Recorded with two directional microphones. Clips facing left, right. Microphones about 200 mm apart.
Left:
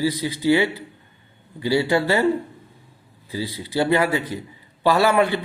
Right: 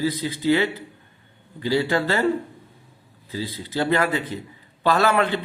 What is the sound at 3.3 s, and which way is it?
Speech, 15° left (ahead or behind).